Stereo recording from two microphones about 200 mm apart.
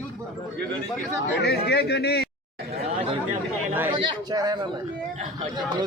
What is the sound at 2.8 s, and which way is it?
A man's voice, 30° right (ahead or behind).